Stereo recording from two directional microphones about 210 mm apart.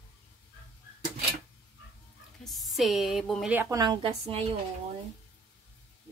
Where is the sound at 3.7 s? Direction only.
20° right (ahead or behind).